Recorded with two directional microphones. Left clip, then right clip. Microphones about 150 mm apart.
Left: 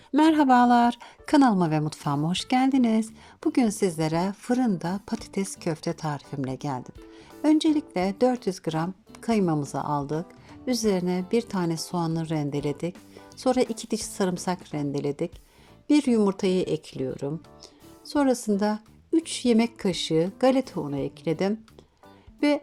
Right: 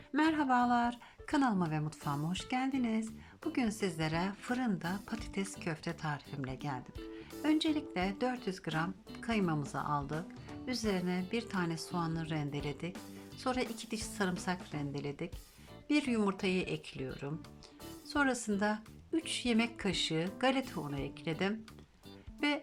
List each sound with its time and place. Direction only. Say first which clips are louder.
0.1 s a woman's voice: left 11 dB; 55° left (ahead or behind)